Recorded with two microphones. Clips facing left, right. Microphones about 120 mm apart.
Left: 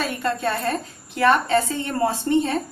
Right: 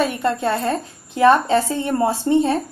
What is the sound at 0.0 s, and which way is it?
A woman's voice, 25° right (ahead or behind).